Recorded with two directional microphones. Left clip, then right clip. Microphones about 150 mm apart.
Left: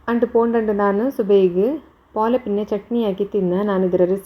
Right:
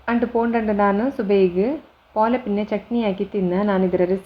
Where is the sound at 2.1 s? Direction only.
Centre (ahead or behind).